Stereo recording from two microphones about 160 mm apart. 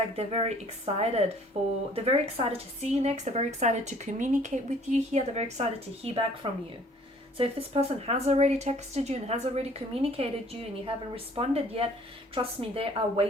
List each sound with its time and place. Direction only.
0.2 s a woman's voice: 40° right (ahead or behind)